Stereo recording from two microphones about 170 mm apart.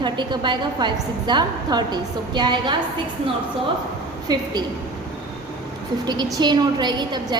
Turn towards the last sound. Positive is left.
turn(degrees=-25)  # may be behind; listen again after turning